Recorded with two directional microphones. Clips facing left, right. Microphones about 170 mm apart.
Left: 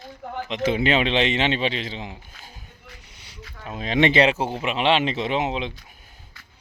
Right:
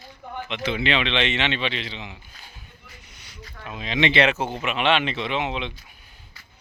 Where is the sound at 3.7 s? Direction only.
45° left (ahead or behind).